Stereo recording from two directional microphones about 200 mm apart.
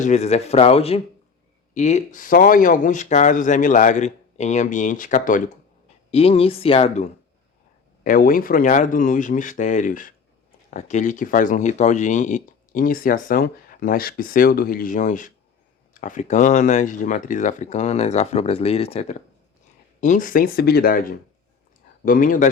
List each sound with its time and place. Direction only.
0.0 s speech: 35° left (ahead or behind)
6.1 s speech: 30° left (ahead or behind)
8.0 s speech: 45° left (ahead or behind)